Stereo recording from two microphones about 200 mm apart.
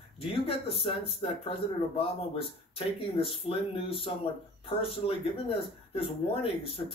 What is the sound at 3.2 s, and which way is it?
Speech, 25° left (ahead or behind).